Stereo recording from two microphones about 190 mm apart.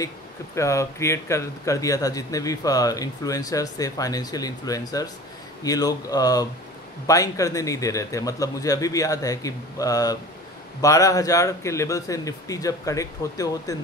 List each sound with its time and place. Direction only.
0.6 s speech: 15° left (ahead or behind)